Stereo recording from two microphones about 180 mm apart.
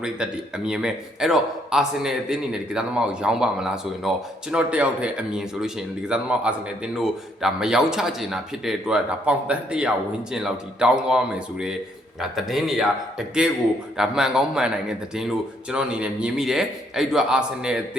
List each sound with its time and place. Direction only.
0.0 s speech: 5° right (ahead or behind)